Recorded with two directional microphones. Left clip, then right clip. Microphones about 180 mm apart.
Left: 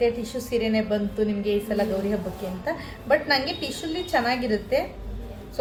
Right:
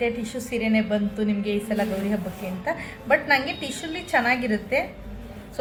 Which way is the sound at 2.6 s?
15° left (ahead or behind).